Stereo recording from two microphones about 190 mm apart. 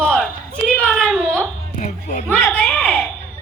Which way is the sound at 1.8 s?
45° left (ahead or behind).